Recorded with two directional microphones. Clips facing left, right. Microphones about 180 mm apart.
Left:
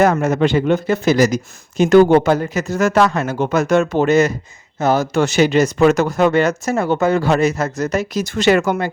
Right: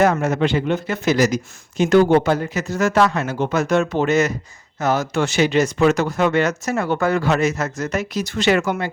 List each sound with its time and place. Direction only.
0.0 s speech: 45° left (ahead or behind)